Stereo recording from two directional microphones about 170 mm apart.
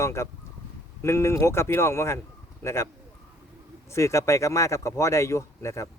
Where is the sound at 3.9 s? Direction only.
15° left (ahead or behind).